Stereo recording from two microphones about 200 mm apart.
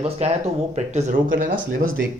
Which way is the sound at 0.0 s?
30° right (ahead or behind).